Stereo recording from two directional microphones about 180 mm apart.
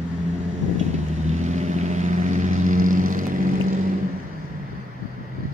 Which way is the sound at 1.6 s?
40° right (ahead or behind).